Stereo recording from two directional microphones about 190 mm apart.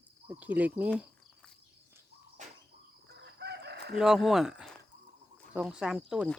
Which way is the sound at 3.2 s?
60° right (ahead or behind).